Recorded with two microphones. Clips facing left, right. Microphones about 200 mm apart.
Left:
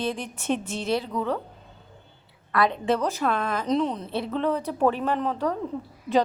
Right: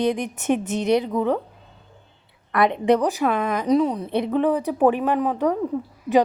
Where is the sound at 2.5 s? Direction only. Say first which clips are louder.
Right 5 dB; 20° right (ahead or behind).